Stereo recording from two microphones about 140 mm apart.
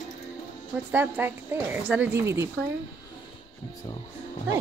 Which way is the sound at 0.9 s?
15° right (ahead or behind).